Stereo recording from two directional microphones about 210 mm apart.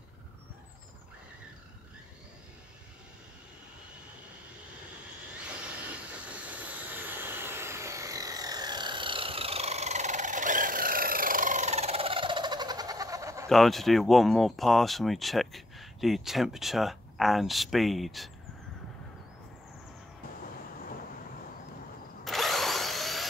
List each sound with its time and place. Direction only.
6.2 s vehicle: 5° right (ahead or behind)
13.5 s speech: centre (ahead or behind)
22.2 s drill: centre (ahead or behind)